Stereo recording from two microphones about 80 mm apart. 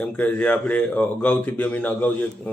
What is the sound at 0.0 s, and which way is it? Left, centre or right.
Speech, centre.